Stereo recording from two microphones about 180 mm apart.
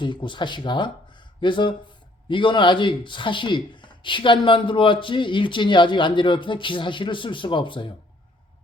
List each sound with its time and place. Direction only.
0.0 s speech: 25° left (ahead or behind)